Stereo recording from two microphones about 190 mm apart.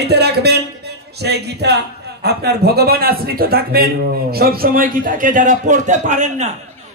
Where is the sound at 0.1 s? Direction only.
60° right (ahead or behind).